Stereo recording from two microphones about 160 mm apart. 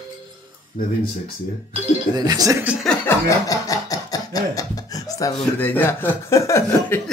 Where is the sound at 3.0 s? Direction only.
20° left (ahead or behind).